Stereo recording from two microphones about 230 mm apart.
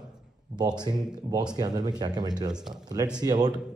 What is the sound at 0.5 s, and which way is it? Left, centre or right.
Speech, centre.